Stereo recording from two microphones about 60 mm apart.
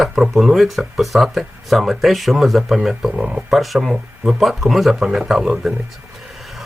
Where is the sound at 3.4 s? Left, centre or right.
Centre.